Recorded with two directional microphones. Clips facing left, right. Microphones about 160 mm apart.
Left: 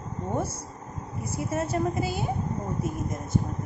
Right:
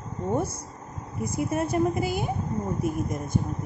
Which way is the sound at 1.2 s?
15° right (ahead or behind).